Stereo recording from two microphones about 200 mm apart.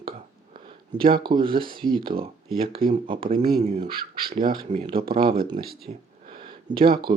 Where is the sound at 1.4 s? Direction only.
25° right (ahead or behind).